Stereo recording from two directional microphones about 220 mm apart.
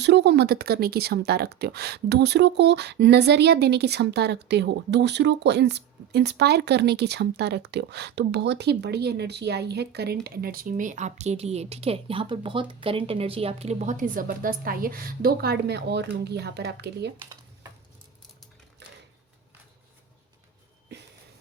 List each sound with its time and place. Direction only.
0.0 s speech: 50° right (ahead or behind)
18.8 s typewriter: 50° right (ahead or behind)